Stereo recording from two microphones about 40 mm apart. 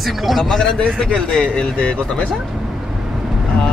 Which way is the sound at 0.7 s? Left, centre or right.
Left.